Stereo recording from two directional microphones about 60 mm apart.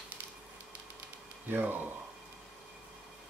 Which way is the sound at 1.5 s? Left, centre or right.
Right.